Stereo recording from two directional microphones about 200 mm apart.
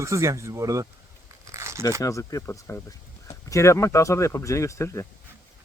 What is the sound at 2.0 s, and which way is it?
Speech, 15° left (ahead or behind).